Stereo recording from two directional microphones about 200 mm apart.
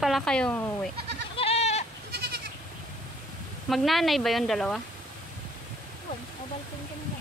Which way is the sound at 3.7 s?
Centre (ahead or behind).